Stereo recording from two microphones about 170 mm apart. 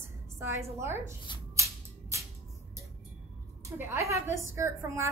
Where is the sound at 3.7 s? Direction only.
15° right (ahead or behind).